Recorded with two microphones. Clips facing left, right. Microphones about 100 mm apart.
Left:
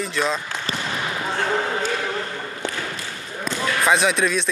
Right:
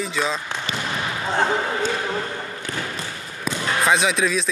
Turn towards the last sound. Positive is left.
turn(degrees=0)  # may be behind; listen again after turning